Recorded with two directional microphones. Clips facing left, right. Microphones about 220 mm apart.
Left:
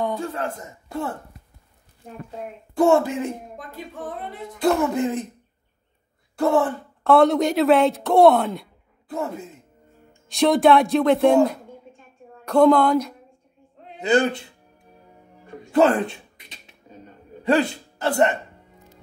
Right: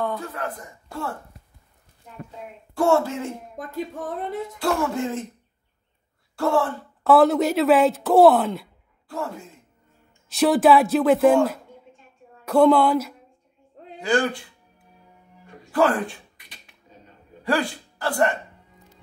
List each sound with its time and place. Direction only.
0.2 s a man's voice: 30° left (ahead or behind)
2.7 s speech: 15° left (ahead or behind)
4.6 s a man's voice: 20° left (ahead or behind)
6.3 s speech: 20° left (ahead or behind)
7.0 s speech: 5° right (ahead or behind)
9.1 s a man's voice: 20° left (ahead or behind)
10.2 s speech: centre (ahead or behind)
13.9 s a man's voice: 20° left (ahead or behind)
15.7 s a sound: 25° left (ahead or behind)
17.4 s speech: 20° left (ahead or behind)